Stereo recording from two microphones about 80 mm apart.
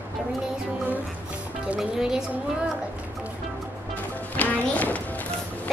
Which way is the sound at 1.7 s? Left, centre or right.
Centre.